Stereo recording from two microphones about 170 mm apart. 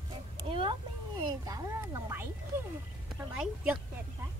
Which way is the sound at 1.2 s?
25° right (ahead or behind).